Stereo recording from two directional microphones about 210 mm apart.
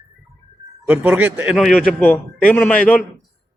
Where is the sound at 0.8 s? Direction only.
10° right (ahead or behind).